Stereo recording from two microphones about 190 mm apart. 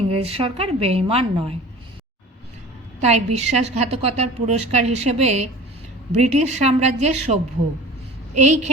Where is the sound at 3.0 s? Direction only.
35° right (ahead or behind).